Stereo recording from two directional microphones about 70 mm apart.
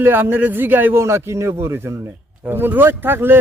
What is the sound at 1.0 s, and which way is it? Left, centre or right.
A man's voice, right.